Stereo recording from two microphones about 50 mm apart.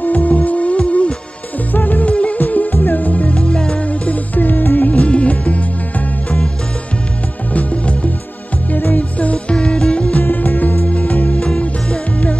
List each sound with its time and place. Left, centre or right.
0.0 s music: left
1.7 s music: left
3.3 s music: centre
7.5 s music: left
8.7 s music: left; by 10.1 s centre
10.1 s music: left
11.3 s music: centre